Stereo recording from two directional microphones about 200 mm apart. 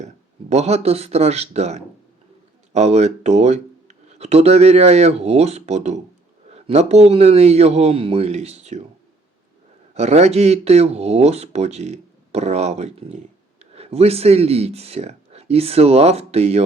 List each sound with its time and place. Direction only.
0.5 s speech: 30° right (ahead or behind)
9.9 s speech: 35° right (ahead or behind)